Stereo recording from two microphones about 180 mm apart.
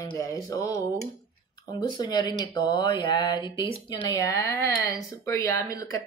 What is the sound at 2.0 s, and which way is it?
Speech, 25° left (ahead or behind).